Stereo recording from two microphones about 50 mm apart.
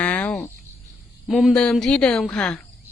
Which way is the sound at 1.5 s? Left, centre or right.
Left.